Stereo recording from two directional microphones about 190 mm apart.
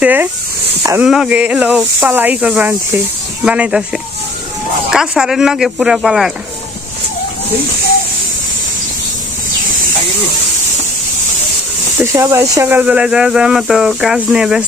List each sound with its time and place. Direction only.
0.0 s speech: 10° right (ahead or behind)
12.0 s speech: 15° right (ahead or behind)